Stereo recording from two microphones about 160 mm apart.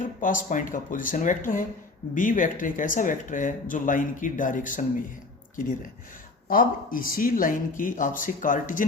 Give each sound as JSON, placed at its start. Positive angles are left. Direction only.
{"t": 0.0, "sound": "speech", "side_deg": 55}
{"t": 6.5, "sound": "speech", "side_deg": 60}